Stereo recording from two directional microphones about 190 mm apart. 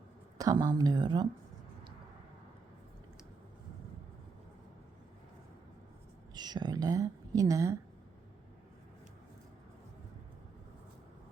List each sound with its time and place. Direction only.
0.3 s speech: 20° right (ahead or behind)
6.3 s speech: 20° right (ahead or behind)